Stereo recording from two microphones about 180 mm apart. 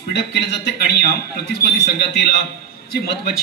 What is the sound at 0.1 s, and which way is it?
Speech, 70° left (ahead or behind).